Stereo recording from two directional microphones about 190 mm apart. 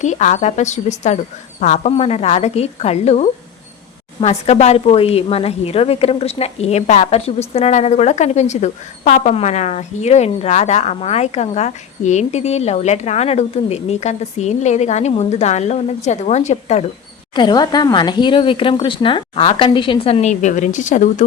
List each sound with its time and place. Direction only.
0.0 s a woman's voice: 40° left (ahead or behind)
17.3 s speech: 20° left (ahead or behind); by 21.2 s 40° left (ahead or behind)